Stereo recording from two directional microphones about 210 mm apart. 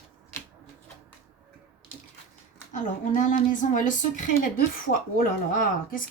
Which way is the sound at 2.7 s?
35° left (ahead or behind).